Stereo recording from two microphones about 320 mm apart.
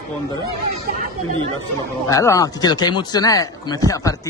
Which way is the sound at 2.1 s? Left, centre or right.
Centre.